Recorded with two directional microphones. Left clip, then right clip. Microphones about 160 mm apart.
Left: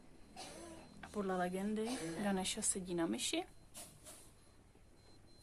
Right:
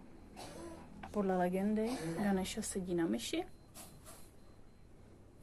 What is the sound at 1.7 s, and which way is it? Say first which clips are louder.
A woman's voice: right 4 dB; 20° left (ahead or behind).